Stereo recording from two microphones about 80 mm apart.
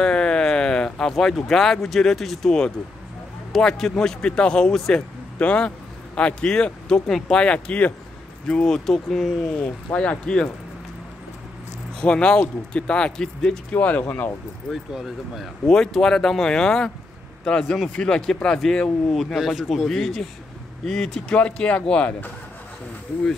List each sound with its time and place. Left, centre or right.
0.0 s speech: centre
12.0 s speech: centre
14.7 s speech: centre
15.6 s speech: centre